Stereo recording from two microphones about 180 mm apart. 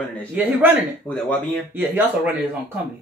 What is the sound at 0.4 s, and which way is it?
Speech, 10° right (ahead or behind).